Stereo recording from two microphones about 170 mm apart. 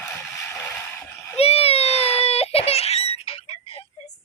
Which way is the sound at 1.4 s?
35° left (ahead or behind).